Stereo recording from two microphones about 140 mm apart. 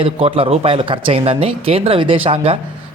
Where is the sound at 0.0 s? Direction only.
40° right (ahead or behind).